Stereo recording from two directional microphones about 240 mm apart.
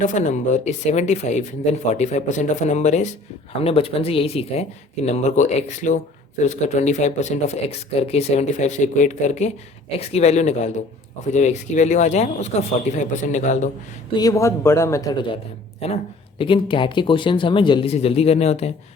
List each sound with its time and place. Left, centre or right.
0.0 s speech: left
14.2 s a man's voice: centre
16.4 s speech: left